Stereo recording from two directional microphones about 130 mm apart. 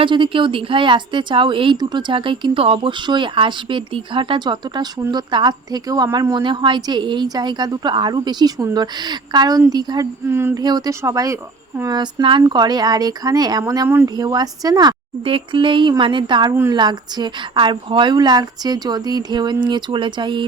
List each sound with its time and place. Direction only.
0.0 s speech: 40° right (ahead or behind)
6.3 s speech: 35° right (ahead or behind)
10.2 s speech: 20° right (ahead or behind)
10.6 s speech: 30° right (ahead or behind)
13.8 s speech: 15° right (ahead or behind)
14.2 s speech: 30° right (ahead or behind)